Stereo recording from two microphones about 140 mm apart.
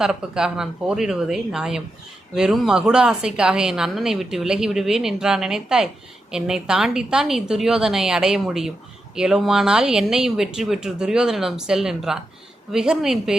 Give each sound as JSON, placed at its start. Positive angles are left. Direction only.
{"t": 0.0, "sound": "a woman's voice", "side_deg": -5}